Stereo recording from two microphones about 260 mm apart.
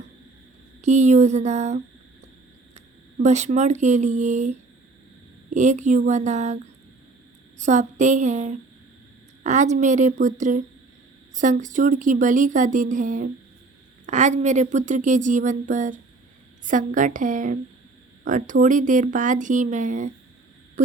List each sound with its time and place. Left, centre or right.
0.8 s speech: right
7.6 s speech: right